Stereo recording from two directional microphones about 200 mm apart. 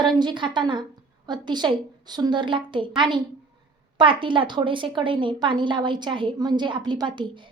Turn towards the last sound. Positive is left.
turn(degrees=-20)  # may be behind; listen again after turning